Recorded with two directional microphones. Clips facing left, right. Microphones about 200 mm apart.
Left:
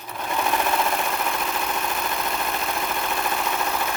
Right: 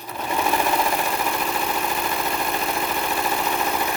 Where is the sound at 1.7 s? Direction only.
5° right (ahead or behind).